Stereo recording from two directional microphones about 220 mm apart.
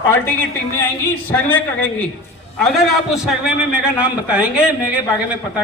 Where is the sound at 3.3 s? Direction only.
5° right (ahead or behind).